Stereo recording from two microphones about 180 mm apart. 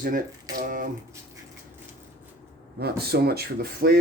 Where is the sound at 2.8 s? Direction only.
60° right (ahead or behind).